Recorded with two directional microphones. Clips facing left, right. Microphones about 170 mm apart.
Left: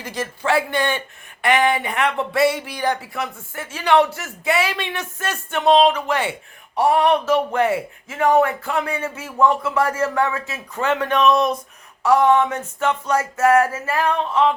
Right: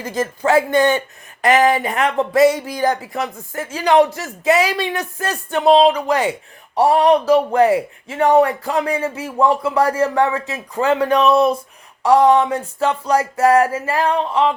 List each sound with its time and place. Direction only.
0.0 s speech: 45° right (ahead or behind)